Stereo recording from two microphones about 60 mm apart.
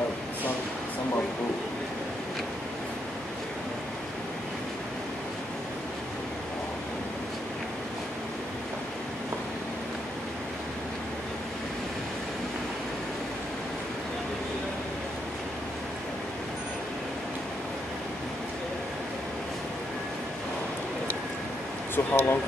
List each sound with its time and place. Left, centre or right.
21.9 s speech: left